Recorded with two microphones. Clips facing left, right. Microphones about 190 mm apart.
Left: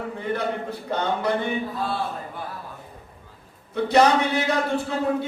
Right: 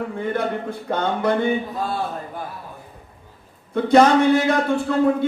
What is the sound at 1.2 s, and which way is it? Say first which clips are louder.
Speech: right 5 dB; 50° right (ahead or behind).